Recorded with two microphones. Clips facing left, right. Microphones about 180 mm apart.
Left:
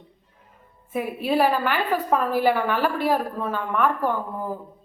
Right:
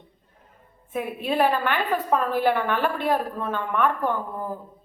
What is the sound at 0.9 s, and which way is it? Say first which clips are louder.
A woman's voice: left 2 dB; 5° left (ahead or behind).